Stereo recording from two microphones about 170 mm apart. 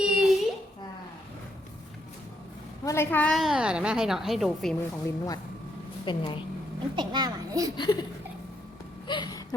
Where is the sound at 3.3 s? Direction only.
Centre (ahead or behind).